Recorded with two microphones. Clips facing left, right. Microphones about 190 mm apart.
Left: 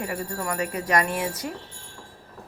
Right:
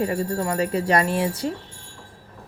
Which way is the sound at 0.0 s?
30° right (ahead or behind).